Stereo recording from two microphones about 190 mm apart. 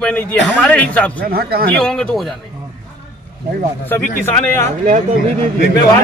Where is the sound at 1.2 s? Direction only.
50° right (ahead or behind).